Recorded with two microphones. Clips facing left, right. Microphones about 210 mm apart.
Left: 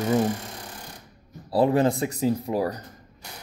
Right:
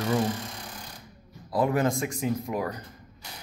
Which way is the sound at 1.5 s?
30° left (ahead or behind).